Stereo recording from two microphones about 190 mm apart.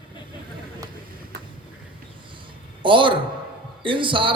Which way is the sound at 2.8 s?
25° right (ahead or behind).